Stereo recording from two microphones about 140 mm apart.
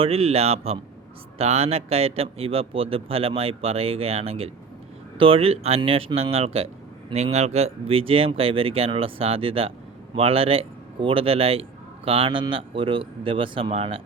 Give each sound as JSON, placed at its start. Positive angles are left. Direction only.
{"t": 0.0, "sound": "a man's voice", "side_deg": -45}